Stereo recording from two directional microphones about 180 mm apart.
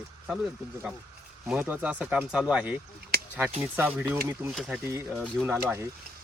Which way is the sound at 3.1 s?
60° right (ahead or behind).